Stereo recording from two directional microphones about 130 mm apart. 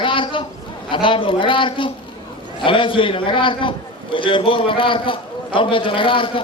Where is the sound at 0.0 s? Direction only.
40° left (ahead or behind).